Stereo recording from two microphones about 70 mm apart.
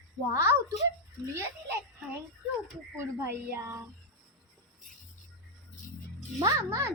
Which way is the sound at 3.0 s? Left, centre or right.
Right.